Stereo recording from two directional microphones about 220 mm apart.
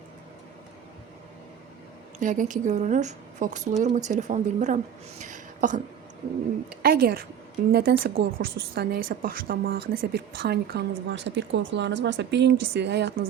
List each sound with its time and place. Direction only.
2.1 s a woman's voice: 35° right (ahead or behind)
5.2 s a sound: 35° right (ahead or behind)
6.8 s a woman's voice: 45° right (ahead or behind)